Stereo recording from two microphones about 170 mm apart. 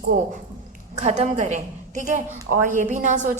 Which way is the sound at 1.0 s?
40° right (ahead or behind).